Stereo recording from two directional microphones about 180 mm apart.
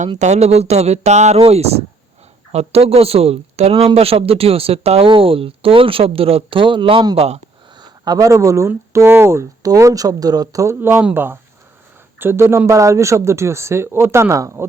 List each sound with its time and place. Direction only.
0.2 s speech: 40° right (ahead or behind); by 14.7 s 15° right (ahead or behind)